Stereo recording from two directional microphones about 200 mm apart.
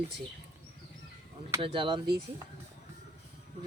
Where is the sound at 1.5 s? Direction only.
25° right (ahead or behind).